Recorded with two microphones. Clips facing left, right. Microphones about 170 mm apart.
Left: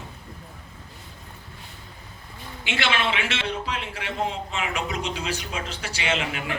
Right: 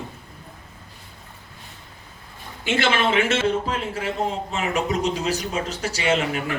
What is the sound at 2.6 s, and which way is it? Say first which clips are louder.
A man's voice: right 5 dB; 45° right (ahead or behind).